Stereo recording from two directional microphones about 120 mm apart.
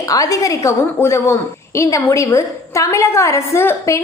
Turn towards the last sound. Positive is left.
turn(degrees=25)  # may be behind; listen again after turning